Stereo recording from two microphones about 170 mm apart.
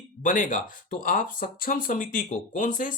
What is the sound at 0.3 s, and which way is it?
Speech, 50° left (ahead or behind).